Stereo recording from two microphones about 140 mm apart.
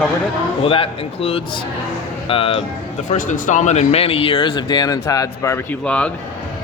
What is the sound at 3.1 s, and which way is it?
Speech, 60° left (ahead or behind).